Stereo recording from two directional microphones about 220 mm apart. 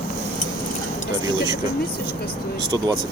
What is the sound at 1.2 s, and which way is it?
Vehicle, 20° right (ahead or behind).